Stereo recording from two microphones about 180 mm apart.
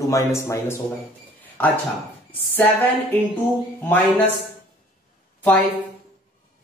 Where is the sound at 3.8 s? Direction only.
10° left (ahead or behind).